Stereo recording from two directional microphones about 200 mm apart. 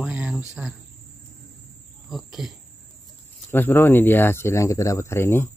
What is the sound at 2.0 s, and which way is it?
Speech, centre (ahead or behind).